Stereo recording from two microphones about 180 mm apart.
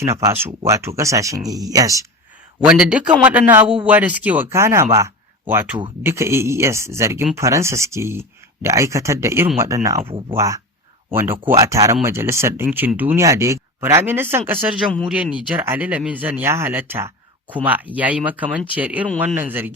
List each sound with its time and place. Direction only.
0.0 s speech: 15° right (ahead or behind)
2.6 s a man's voice: 5° right (ahead or behind)
10.1 s speech: 30° right (ahead or behind)
10.3 s speech: 15° right (ahead or behind)